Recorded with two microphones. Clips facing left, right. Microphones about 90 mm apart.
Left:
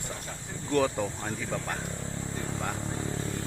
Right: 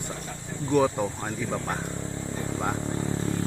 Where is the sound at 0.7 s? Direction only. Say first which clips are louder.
Right 4 dB; 15° right (ahead or behind).